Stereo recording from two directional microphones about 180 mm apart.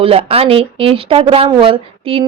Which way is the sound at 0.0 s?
35° right (ahead or behind).